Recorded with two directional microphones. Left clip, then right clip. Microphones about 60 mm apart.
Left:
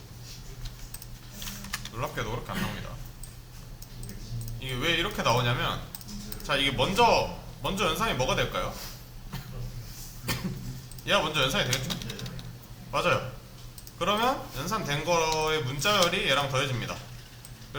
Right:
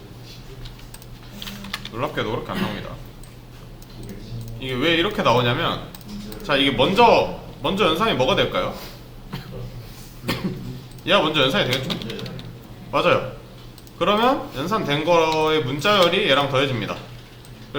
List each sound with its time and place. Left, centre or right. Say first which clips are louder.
1.5 s typing: right 5 dB; centre
1.8 s speech: right 9 dB; left
4.6 s speech: right 8 dB; left
10.2 s cough: right 7 dB; left
11.0 s speech: right 8 dB; left
12.9 s speech: right 8 dB; centre